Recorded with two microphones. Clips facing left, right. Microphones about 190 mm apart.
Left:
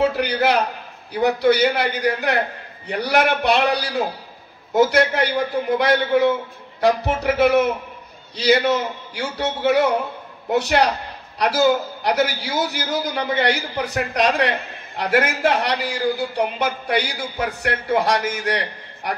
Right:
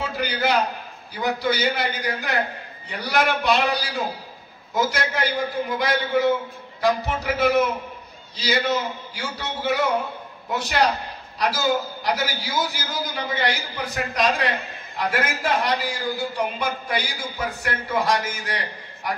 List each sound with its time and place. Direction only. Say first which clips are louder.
0.0 s a man's voice: left 6 dB; 65° left (ahead or behind)